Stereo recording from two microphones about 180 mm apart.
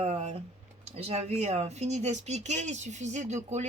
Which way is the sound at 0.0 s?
35° right (ahead or behind).